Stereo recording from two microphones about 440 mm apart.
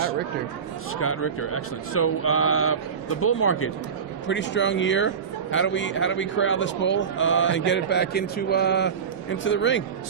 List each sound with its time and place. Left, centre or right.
0.9 s a man's voice: left